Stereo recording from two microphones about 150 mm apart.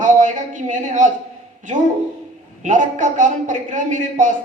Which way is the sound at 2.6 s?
60° right (ahead or behind).